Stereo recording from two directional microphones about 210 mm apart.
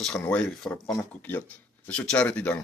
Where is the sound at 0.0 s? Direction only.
5° left (ahead or behind).